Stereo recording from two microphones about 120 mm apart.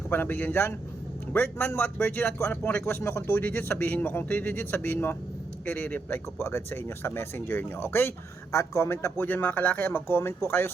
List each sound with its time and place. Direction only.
0.1 s speech: 15° left (ahead or behind)